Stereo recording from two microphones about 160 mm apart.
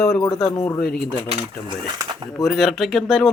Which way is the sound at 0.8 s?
70° left (ahead or behind).